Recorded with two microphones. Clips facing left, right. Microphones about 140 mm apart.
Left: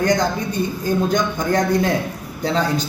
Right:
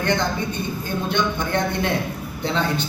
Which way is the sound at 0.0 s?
40° left (ahead or behind).